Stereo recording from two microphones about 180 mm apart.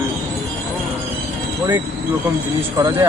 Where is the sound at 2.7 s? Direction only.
15° right (ahead or behind).